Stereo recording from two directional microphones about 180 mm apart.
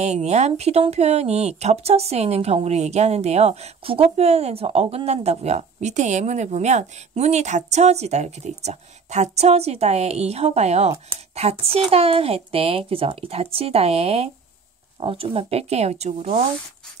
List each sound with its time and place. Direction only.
0.0 s speech: 40° right (ahead or behind)